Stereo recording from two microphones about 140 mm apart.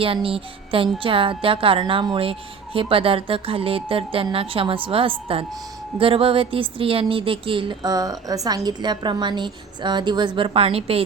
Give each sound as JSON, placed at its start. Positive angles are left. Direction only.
{"t": 0.0, "sound": "a woman's voice", "side_deg": -40}